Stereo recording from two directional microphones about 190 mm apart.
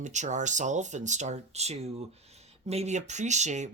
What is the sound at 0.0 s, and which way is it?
Speech, 40° right (ahead or behind).